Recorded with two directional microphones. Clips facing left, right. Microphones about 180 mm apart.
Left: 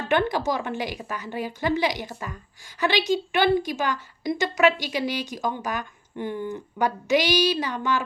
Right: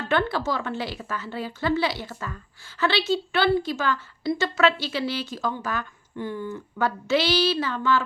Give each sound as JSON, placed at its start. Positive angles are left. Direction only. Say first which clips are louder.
{"t": 0.0, "sound": "a woman's voice", "louder": "left 1 dB", "side_deg": 15}